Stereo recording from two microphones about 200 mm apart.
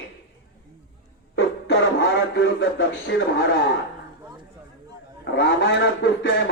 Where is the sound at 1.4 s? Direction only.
60° left (ahead or behind).